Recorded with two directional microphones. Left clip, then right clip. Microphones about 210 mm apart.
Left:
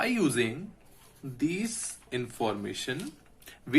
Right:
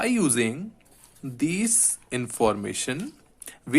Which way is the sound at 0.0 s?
35° right (ahead or behind).